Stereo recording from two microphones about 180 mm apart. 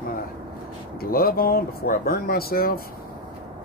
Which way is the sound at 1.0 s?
55° left (ahead or behind).